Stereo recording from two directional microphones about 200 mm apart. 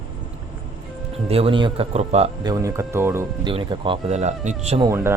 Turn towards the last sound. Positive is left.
turn(degrees=-15)  # may be behind; listen again after turning